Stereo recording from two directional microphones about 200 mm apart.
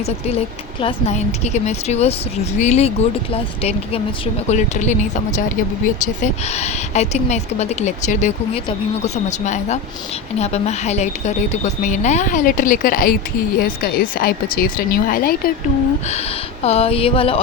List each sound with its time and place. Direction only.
0.0 s a woman's voice: 30° left (ahead or behind)
6.2 s a woman's voice: 35° left (ahead or behind)
16.6 s speech: 30° left (ahead or behind)